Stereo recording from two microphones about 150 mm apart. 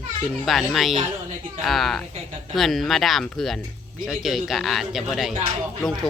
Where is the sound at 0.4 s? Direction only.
Centre (ahead or behind).